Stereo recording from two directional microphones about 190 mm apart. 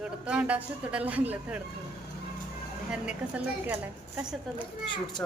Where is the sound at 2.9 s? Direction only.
5° right (ahead or behind).